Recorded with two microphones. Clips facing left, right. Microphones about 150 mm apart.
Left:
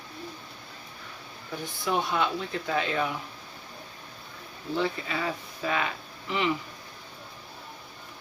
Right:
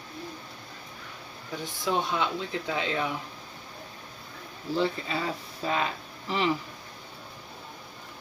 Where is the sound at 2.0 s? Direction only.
20° right (ahead or behind).